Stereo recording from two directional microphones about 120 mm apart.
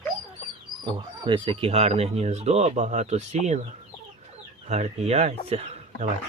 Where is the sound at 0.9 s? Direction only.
45° right (ahead or behind); by 3.6 s 75° right (ahead or behind).